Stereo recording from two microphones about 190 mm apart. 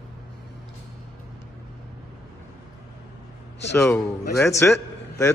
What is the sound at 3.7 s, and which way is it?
A man's voice, 10° left (ahead or behind).